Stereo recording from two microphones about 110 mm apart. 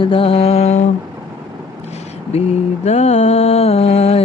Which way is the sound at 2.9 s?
85° left.